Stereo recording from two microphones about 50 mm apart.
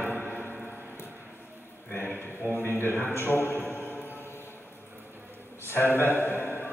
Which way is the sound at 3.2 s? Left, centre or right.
Left.